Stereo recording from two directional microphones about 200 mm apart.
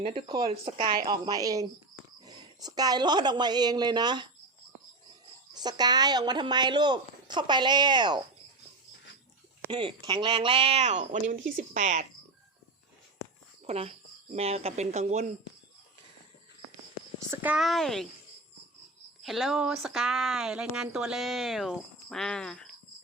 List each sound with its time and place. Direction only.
0.0 s a woman's voice: 25° right (ahead or behind)
5.5 s a woman's voice: 20° right (ahead or behind)
9.6 s a woman's voice: 25° right (ahead or behind)
13.7 s speech: 30° right (ahead or behind)
17.3 s speech: 5° right (ahead or behind)
19.2 s speech: centre (ahead or behind)